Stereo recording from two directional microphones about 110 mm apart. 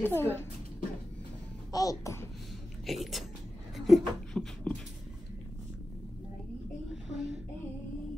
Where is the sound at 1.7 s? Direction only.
35° left (ahead or behind).